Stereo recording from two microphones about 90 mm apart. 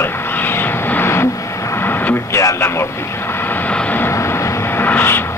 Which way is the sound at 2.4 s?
30° left (ahead or behind).